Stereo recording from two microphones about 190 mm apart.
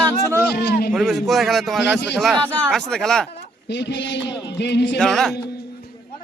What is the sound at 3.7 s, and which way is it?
Speech, 65° left (ahead or behind).